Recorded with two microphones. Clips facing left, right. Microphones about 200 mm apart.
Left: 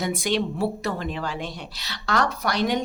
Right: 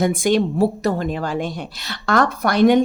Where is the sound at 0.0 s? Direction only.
50° right (ahead or behind).